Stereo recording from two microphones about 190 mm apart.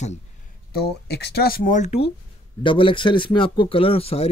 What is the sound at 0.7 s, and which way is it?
Speech, 60° left (ahead or behind).